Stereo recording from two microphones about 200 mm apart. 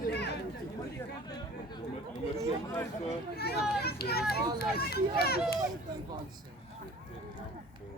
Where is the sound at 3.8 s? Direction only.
50° left (ahead or behind).